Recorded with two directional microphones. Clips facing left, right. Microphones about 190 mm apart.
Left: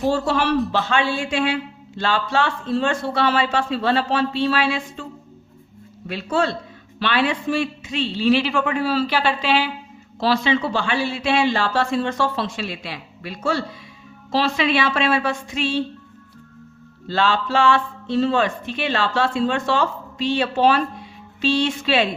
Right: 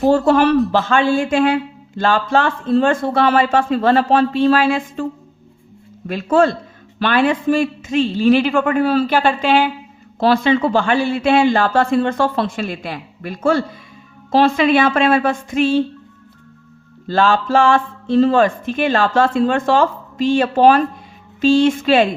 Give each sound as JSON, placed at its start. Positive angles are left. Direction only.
{"t": 0.3, "sound": "speech", "side_deg": -50}
{"t": 6.1, "sound": "speech", "side_deg": -50}
{"t": 17.1, "sound": "speech", "side_deg": -45}